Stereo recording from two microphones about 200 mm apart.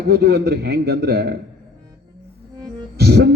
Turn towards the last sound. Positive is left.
turn(degrees=-55)  # may be behind; listen again after turning